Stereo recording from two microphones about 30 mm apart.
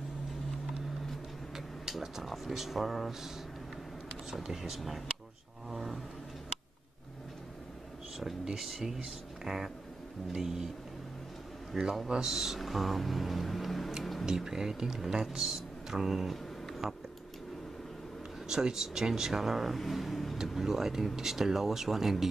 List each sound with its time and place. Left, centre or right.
1.9 s speech: centre
2.2 s speech: centre
4.3 s speech: centre
5.7 s roar: centre
8.6 s speech: centre
11.7 s a man's voice: centre
14.2 s speech: centre
18.5 s speech: centre
20.5 s speech: centre